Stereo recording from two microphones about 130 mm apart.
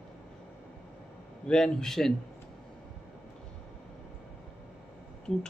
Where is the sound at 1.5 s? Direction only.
5° left (ahead or behind).